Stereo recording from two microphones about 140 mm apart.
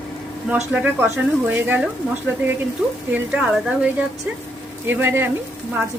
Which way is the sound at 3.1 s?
10° right (ahead or behind).